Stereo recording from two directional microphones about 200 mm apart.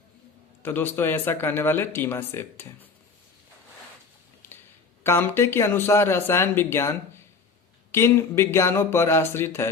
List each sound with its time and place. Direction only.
0.6 s speech: 10° left (ahead or behind)
4.4 s a sound: 10° left (ahead or behind)
5.0 s speech: 10° left (ahead or behind)
7.9 s speech: 15° left (ahead or behind)